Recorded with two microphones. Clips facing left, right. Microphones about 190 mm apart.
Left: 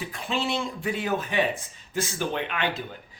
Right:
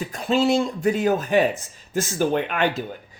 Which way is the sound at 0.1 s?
40° right (ahead or behind).